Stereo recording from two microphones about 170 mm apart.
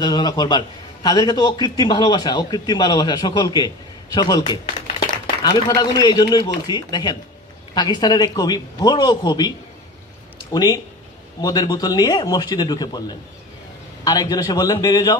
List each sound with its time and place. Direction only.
0.0 s a man's voice: 25° left (ahead or behind)
10.5 s a man's voice: 20° left (ahead or behind)
14.0 s a man's voice: 25° left (ahead or behind)